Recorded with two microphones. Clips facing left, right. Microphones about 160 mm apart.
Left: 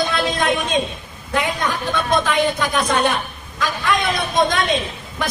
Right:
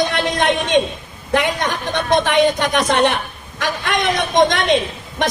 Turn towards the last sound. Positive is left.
turn(degrees=-75)  # may be behind; listen again after turning